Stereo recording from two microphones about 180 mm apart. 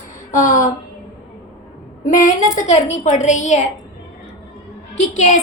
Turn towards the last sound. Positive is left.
turn(degrees=40)  # may be behind; listen again after turning